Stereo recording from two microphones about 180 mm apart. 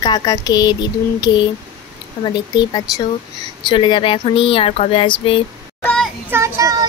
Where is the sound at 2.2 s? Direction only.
25° left (ahead or behind).